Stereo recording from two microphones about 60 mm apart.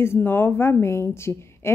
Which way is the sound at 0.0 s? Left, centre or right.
Left.